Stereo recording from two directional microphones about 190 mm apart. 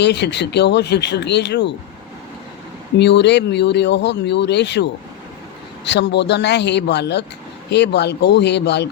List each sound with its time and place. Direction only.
0.0 s speech: 65° left (ahead or behind)
3.0 s speech: 65° left (ahead or behind)